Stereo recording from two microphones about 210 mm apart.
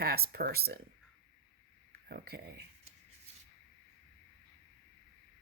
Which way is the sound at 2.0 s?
45° right (ahead or behind).